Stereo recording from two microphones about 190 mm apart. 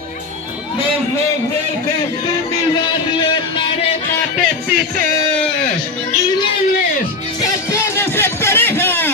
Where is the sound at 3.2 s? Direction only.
25° left (ahead or behind).